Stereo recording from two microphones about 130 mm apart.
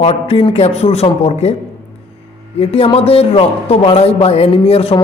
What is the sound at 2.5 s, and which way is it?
A man's voice, 45° left (ahead or behind).